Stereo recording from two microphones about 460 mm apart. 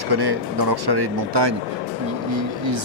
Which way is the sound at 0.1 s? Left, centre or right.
Right.